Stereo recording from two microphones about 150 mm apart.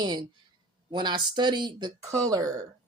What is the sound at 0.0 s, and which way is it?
Speech, 30° right (ahead or behind).